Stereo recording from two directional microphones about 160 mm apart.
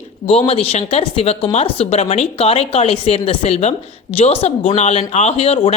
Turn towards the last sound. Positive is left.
turn(degrees=40)  # may be behind; listen again after turning